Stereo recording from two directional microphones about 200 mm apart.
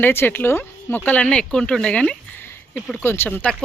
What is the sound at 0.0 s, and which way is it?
Speech, 10° left (ahead or behind).